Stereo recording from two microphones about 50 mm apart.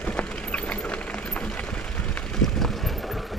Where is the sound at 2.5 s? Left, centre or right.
Centre.